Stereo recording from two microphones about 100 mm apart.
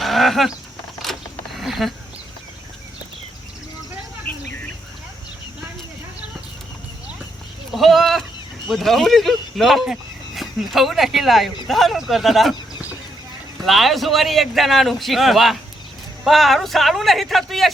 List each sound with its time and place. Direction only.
0.0 s horse: centre (ahead or behind)
1.5 s speech: centre (ahead or behind)
4.3 s a sound: 15° left (ahead or behind)
7.7 s a man's voice: centre (ahead or behind)
13.7 s a man's voice: centre (ahead or behind)